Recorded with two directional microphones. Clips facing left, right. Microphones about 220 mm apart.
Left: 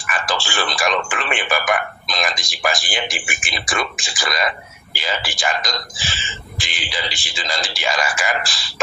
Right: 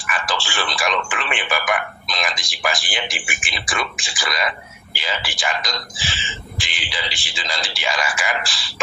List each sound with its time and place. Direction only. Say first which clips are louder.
0.0 s speech: left 2 dB; 45° left (ahead or behind)